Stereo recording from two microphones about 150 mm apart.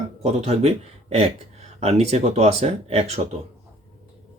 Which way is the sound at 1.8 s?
45° right (ahead or behind).